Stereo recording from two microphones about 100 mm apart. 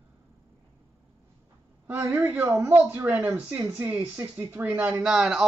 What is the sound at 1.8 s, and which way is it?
Speech, 15° right (ahead or behind).